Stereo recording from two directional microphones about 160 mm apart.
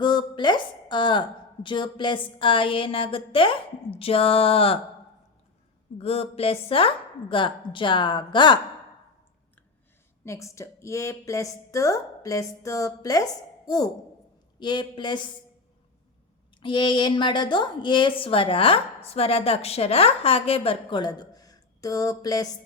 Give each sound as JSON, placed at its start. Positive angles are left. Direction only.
{"t": 0.0, "sound": "a sound", "side_deg": 30}
{"t": 1.6, "sound": "a woman's voice", "side_deg": 30}
{"t": 6.0, "sound": "a woman's voice", "side_deg": 40}
{"t": 10.2, "sound": "a woman's voice", "side_deg": 20}
{"t": 16.6, "sound": "a woman's voice", "side_deg": 30}